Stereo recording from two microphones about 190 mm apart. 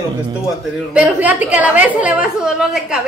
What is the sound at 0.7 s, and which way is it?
A woman's voice, 5° right (ahead or behind).